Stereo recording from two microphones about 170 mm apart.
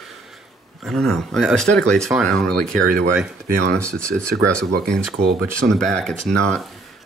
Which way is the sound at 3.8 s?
15° right (ahead or behind).